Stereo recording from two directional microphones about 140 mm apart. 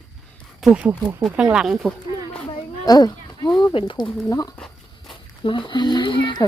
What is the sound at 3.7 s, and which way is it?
Speech, 35° left (ahead or behind).